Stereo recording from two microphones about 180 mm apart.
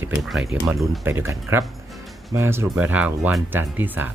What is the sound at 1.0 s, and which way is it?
Speech, 15° right (ahead or behind).